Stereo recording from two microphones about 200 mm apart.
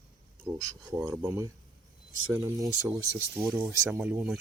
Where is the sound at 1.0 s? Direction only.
15° right (ahead or behind).